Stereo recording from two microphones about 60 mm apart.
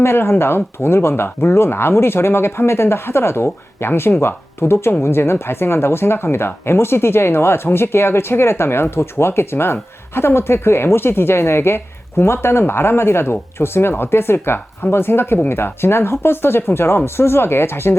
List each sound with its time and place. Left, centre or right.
0.0 s speech: left